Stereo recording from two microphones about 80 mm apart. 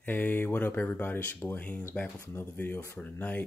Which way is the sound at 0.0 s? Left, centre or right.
Left.